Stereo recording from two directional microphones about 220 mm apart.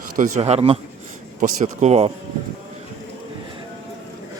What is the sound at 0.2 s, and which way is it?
A man's voice, 30° right (ahead or behind).